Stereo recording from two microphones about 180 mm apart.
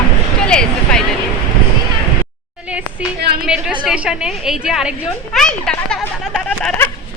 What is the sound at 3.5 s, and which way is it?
A woman's voice, 5° right (ahead or behind).